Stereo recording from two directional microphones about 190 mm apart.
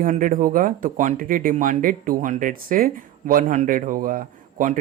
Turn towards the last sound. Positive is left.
turn(degrees=-45)  # may be behind; listen again after turning